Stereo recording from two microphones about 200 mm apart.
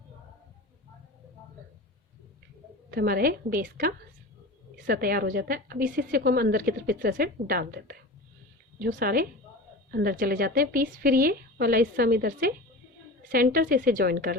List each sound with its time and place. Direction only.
2.9 s a woman's voice: 50° right (ahead or behind)